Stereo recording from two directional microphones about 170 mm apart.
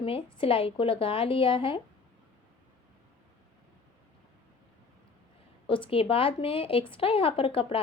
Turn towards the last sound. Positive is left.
turn(degrees=30)  # may be behind; listen again after turning